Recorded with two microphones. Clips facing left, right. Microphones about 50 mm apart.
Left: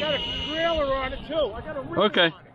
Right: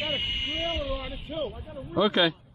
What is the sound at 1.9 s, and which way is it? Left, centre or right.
Speech, left.